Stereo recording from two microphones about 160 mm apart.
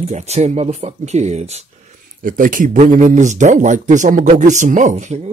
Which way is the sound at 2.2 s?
60° right (ahead or behind).